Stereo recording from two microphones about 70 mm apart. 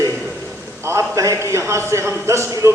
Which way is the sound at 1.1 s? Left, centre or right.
Right.